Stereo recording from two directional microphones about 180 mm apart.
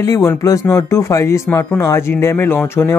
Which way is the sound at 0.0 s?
15° left (ahead or behind).